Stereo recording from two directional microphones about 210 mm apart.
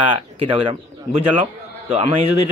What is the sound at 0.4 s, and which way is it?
Speech, 25° right (ahead or behind).